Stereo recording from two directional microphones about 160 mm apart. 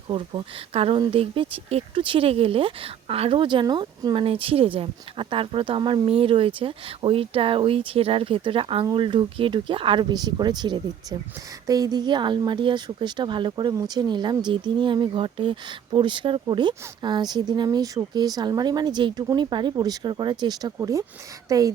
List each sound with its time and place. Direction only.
0.1 s speech: 30° right (ahead or behind)